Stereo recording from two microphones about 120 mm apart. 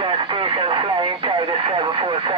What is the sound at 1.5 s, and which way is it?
Vehicle, 50° right (ahead or behind).